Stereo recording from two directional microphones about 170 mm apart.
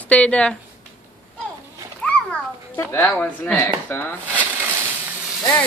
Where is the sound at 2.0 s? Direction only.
10° left (ahead or behind).